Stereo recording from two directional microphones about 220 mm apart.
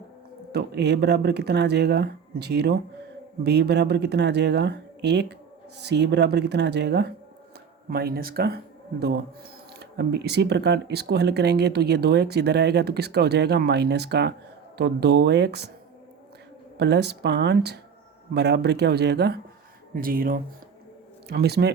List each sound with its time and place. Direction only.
0.5 s speech: 50° right (ahead or behind)
16.7 s speech: 50° right (ahead or behind)